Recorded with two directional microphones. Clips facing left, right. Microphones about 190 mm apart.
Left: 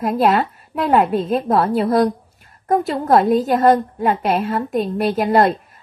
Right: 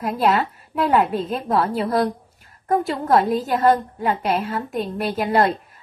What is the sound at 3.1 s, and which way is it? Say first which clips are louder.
A woman's voice: left 4 dB; 45° left (ahead or behind).